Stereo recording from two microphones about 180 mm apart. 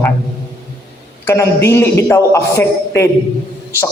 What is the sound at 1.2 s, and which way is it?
A man's voice, 15° left (ahead or behind).